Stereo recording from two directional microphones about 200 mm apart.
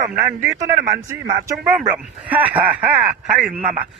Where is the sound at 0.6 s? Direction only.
15° right (ahead or behind).